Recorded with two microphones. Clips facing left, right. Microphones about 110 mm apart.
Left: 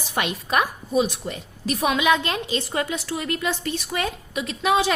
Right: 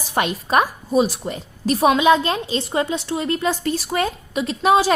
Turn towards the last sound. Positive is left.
turn(degrees=-35)  # may be behind; listen again after turning